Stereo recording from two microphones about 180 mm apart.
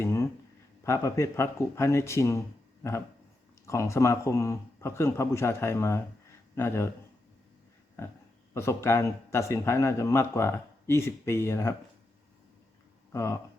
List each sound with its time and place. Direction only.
0.0 s a sound: 15° left (ahead or behind)
0.9 s speech: 15° left (ahead or behind)
8.0 s speech: 15° left (ahead or behind)
13.1 s speech: 15° left (ahead or behind)